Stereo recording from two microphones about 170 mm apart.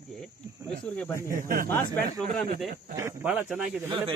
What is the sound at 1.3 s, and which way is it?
Speech, 55° right (ahead or behind).